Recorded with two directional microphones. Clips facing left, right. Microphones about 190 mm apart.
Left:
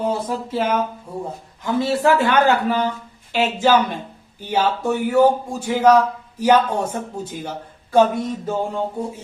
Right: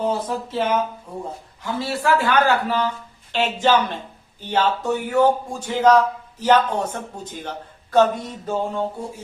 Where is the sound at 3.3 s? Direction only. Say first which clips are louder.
Left 2 dB; 10° left (ahead or behind).